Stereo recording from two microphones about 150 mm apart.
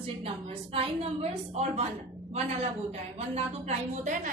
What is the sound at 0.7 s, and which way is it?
A woman's voice, 40° right (ahead or behind).